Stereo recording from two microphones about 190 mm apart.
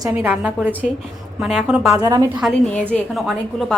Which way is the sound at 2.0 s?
15° right (ahead or behind).